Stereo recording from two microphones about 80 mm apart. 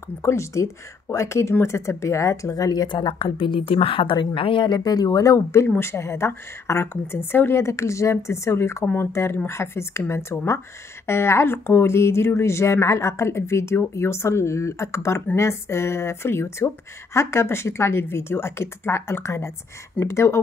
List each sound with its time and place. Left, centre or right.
0.2 s speech: left